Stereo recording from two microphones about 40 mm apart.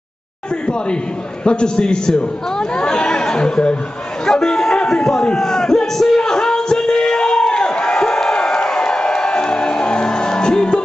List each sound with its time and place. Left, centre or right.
1.4 s a man's voice: left
4.3 s chatter: centre
5.4 s music: centre